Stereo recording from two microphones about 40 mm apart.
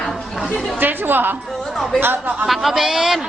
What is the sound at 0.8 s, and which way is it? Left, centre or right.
Speech, right.